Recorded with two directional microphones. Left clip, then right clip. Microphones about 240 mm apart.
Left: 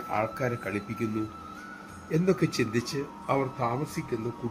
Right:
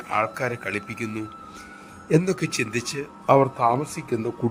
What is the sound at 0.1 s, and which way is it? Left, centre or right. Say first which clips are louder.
Speech: right 5 dB; right.